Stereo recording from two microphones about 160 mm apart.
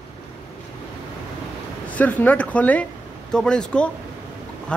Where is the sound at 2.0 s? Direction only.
10° left (ahead or behind).